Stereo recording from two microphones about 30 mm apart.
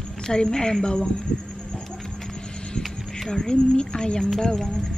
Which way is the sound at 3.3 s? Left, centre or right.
Left.